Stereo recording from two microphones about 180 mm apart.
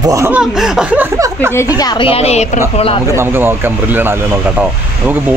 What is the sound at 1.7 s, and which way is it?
Speech, 25° left (ahead or behind).